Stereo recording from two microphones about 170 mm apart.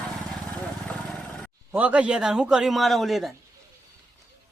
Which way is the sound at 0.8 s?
5° left (ahead or behind).